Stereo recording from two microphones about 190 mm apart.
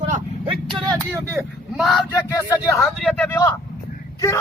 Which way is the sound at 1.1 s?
15° right (ahead or behind).